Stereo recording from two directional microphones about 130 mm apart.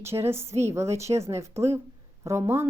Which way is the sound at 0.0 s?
20° right (ahead or behind).